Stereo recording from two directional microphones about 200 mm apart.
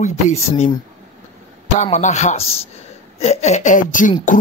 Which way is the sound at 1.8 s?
35° left (ahead or behind).